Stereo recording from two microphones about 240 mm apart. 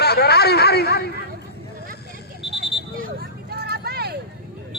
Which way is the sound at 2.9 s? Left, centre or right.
Right.